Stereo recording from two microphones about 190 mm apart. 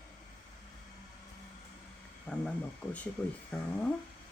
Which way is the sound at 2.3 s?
5° left (ahead or behind).